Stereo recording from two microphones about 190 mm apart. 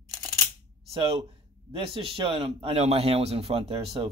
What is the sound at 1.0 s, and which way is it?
A man's voice, 30° right (ahead or behind).